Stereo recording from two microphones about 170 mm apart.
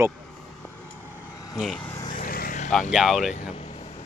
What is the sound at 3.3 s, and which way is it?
Vehicle, 40° left (ahead or behind).